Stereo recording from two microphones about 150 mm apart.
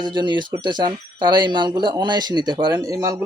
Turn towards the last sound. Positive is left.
turn(degrees=-20)  # may be behind; listen again after turning